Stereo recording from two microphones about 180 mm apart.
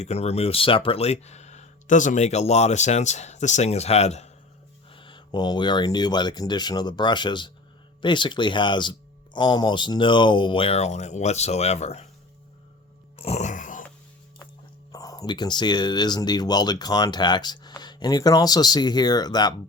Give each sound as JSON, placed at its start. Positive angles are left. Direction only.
{"t": 0.0, "sound": "speech", "side_deg": 35}
{"t": 13.1, "sound": "music", "side_deg": 35}
{"t": 14.9, "sound": "speech", "side_deg": 20}